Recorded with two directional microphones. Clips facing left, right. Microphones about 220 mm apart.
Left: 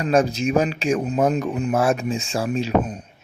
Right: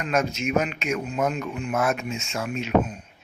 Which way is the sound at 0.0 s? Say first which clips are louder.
Left 6 dB; 35° left (ahead or behind).